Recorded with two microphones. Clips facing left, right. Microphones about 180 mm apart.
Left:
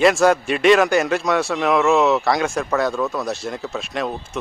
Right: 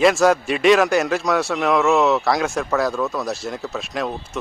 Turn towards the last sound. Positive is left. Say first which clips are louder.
# even
turn(degrees=0)  # may be behind; listen again after turning